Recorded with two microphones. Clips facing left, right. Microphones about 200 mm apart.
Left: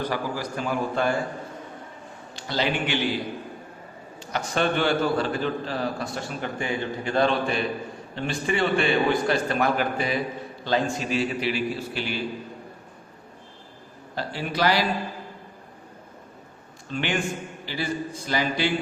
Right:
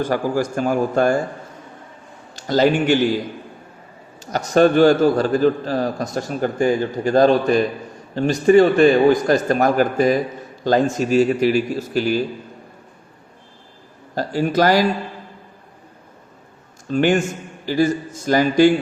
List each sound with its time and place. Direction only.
0.0 s a man's voice: 45° right (ahead or behind)
2.3 s a man's voice: 45° right (ahead or behind)
4.2 s a man's voice: 40° right (ahead or behind)
14.2 s a man's voice: 45° right (ahead or behind)
16.9 s a man's voice: 45° right (ahead or behind)